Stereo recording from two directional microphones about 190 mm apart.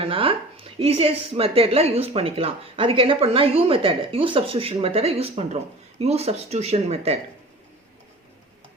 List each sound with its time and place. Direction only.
0.0 s speech: 30° right (ahead or behind)